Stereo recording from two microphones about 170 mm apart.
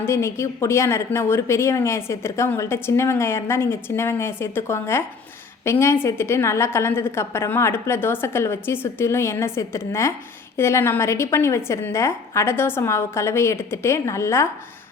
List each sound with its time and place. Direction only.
0.0 s speech: 15° left (ahead or behind)